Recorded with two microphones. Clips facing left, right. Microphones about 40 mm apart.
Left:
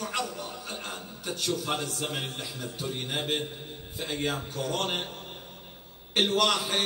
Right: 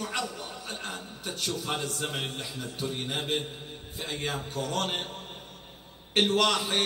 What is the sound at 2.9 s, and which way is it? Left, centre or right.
Speech, centre.